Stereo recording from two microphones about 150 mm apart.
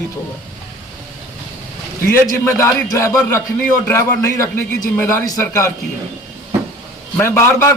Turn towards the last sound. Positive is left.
turn(degrees=15)  # may be behind; listen again after turning